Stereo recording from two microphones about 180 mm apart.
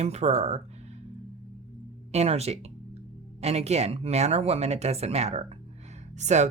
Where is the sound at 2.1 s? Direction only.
35° right (ahead or behind).